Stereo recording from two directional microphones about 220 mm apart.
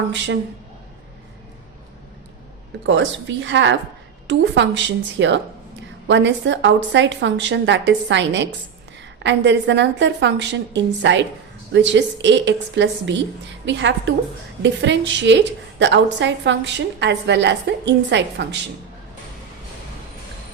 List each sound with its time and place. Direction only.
2.8 s a woman's voice: 55° right (ahead or behind)